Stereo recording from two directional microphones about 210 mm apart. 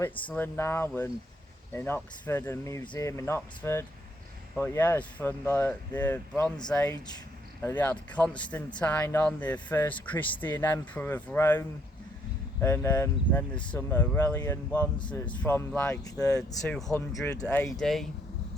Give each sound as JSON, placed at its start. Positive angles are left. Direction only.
{"t": 0.0, "sound": "speech", "side_deg": 10}
{"t": 12.6, "sound": "speech", "side_deg": 10}
{"t": 15.0, "sound": "speech", "side_deg": 20}
{"t": 15.4, "sound": "speech", "side_deg": 10}
{"t": 17.7, "sound": "speech", "side_deg": 0}